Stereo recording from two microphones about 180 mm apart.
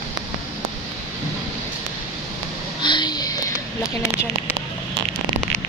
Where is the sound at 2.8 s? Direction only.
25° left (ahead or behind).